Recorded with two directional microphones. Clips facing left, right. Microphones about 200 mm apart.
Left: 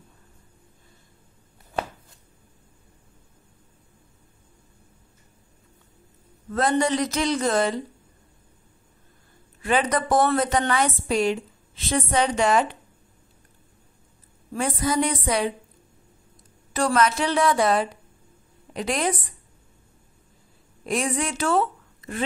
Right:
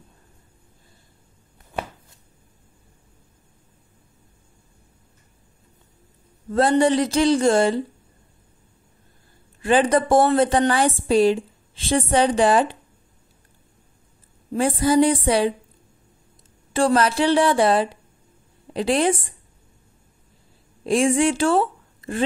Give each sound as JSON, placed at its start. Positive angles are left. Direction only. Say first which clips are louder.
{"t": 6.5, "sound": "a woman's voice", "louder": "right 5 dB", "side_deg": -30}
{"t": 9.6, "sound": "a woman's voice", "louder": "right 5 dB", "side_deg": -30}
{"t": 14.5, "sound": "a woman's voice", "louder": "right 6 dB", "side_deg": -30}
{"t": 16.7, "sound": "a woman's voice", "louder": "right 3 dB", "side_deg": -30}
{"t": 20.8, "sound": "speech", "louder": "right 8 dB", "side_deg": -30}